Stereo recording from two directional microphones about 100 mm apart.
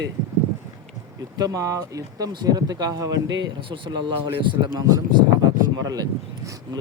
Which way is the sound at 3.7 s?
50° right (ahead or behind).